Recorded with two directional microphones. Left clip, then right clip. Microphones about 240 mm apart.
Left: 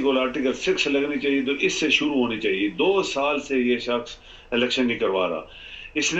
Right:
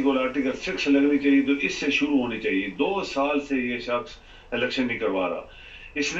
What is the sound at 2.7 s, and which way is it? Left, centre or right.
A man's voice, left.